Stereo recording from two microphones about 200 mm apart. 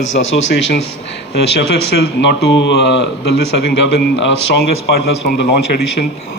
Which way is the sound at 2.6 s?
60° left (ahead or behind).